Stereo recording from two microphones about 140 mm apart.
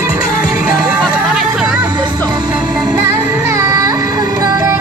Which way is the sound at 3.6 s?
20° right (ahead or behind).